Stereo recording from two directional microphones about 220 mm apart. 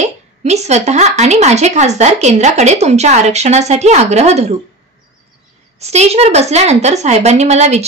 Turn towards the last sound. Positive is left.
turn(degrees=-30)  # may be behind; listen again after turning